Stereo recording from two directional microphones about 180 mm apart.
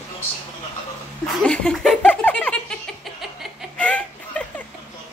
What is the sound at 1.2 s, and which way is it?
Giggle, 5° left (ahead or behind).